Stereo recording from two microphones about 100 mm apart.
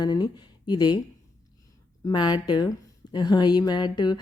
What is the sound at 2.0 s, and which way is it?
Speech, 45° left (ahead or behind).